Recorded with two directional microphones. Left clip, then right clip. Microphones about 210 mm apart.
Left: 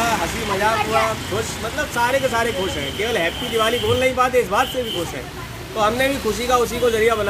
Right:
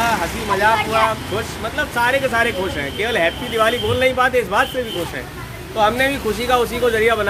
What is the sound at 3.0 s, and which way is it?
Speech, 5° left (ahead or behind).